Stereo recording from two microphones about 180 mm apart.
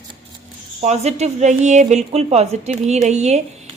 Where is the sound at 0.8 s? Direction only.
35° right (ahead or behind).